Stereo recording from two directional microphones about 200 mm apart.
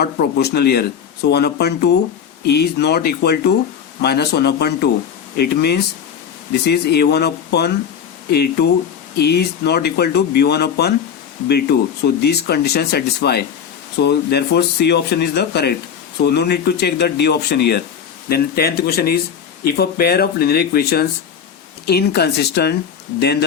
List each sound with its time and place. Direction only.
0.0 s speech: 55° left (ahead or behind)